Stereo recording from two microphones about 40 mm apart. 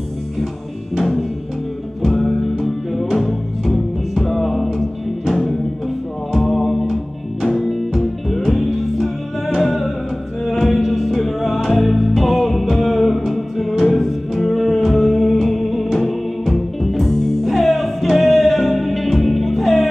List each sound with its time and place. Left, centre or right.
0.9 s drum kit: centre
2.0 s music: centre